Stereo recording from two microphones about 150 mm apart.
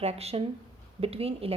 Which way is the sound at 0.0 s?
45° right (ahead or behind).